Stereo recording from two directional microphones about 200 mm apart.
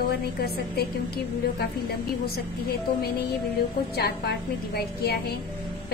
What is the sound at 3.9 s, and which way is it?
Speech, 55° left (ahead or behind).